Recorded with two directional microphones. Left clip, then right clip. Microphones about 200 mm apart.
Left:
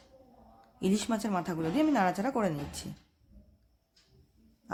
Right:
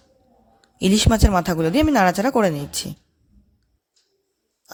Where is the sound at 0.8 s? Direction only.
45° right (ahead or behind).